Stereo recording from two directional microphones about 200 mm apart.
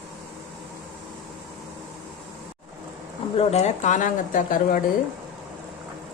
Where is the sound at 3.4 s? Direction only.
30° left (ahead or behind).